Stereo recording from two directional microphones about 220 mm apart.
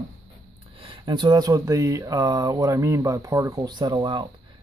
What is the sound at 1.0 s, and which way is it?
Speech, 20° right (ahead or behind).